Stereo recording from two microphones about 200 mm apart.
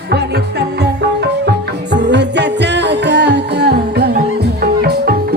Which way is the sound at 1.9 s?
60° right (ahead or behind).